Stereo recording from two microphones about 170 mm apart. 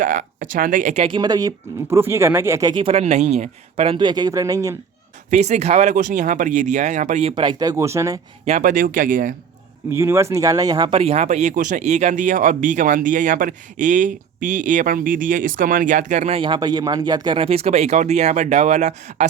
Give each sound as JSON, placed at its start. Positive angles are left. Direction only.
{"t": 0.0, "sound": "speech", "side_deg": -50}
{"t": 1.0, "sound": "speech", "side_deg": -25}
{"t": 2.9, "sound": "speech", "side_deg": -40}
{"t": 3.9, "sound": "speech", "side_deg": -25}
{"t": 5.3, "sound": "speech", "side_deg": -45}
{"t": 8.4, "sound": "speech", "side_deg": -45}
{"t": 9.9, "sound": "speech", "side_deg": -15}